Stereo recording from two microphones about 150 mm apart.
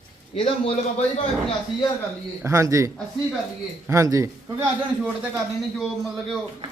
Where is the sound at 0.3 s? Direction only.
40° left (ahead or behind).